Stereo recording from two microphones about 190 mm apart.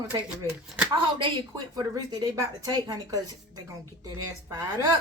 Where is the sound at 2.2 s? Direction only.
20° right (ahead or behind).